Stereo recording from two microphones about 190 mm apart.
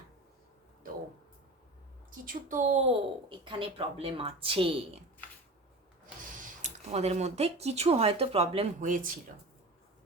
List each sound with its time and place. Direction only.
2.0 s a woman's voice: 45° right (ahead or behind)
2.8 s a woman's voice: 25° right (ahead or behind)
6.4 s speech: 35° right (ahead or behind)
8.8 s a woman's voice: 45° right (ahead or behind)